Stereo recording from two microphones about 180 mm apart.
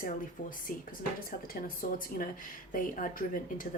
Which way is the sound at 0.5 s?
50° left (ahead or behind).